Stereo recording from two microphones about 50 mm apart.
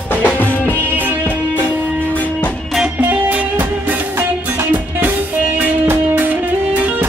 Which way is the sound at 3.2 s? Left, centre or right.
Right.